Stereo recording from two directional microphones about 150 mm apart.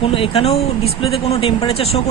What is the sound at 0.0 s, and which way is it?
Speech, 40° left (ahead or behind).